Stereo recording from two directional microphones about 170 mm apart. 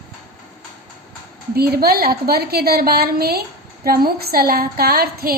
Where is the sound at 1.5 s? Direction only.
65° right (ahead or behind).